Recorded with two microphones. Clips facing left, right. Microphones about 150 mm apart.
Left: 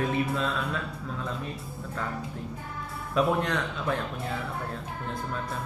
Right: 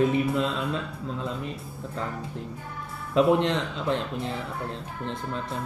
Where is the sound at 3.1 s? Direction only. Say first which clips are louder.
Right 5 dB; 25° right (ahead or behind).